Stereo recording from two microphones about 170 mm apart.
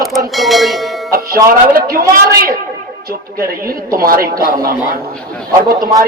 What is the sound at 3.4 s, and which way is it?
Speech, 60° right (ahead or behind).